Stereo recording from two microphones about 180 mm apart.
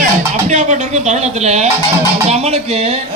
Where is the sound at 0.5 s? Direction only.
40° right (ahead or behind).